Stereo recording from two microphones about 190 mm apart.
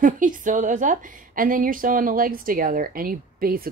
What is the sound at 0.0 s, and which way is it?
A woman's voice, 45° right (ahead or behind).